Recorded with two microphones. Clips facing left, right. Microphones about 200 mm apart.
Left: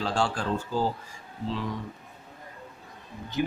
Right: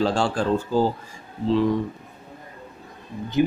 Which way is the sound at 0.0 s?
30° right (ahead or behind).